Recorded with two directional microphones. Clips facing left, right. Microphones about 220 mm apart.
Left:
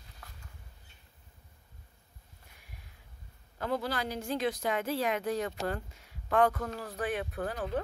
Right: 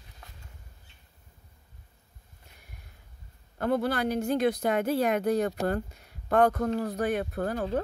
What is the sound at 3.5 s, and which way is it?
Speech, 50° right (ahead or behind).